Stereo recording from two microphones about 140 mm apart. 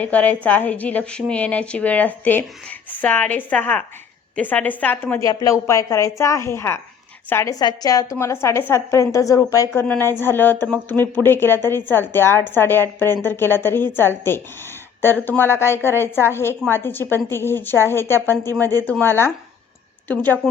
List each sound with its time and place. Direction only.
0.0 s a woman's voice: 10° left (ahead or behind)
7.6 s a woman's voice: 30° left (ahead or behind)
9.8 s a woman's voice: 10° left (ahead or behind)